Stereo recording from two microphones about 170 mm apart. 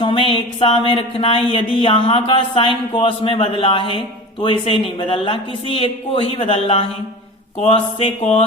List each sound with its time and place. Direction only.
0.0 s speech: 30° left (ahead or behind)